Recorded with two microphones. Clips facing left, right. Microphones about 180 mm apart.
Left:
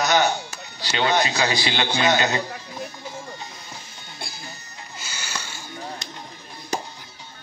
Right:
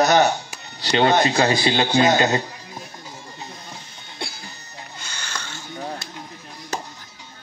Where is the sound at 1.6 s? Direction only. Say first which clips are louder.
Right 5 dB; 35° right (ahead or behind).